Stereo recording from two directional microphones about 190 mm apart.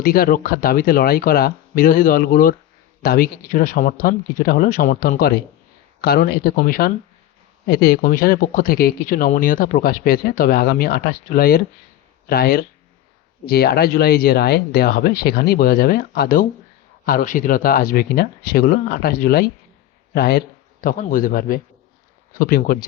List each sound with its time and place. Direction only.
0.0 s speech: 50° left (ahead or behind)